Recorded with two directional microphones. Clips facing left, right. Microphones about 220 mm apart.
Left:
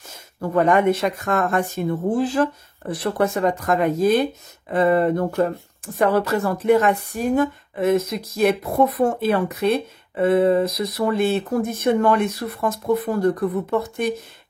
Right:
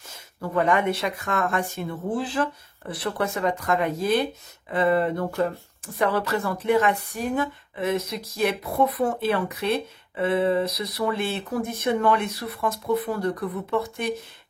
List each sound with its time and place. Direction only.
0.4 s a woman's voice: 45° left (ahead or behind)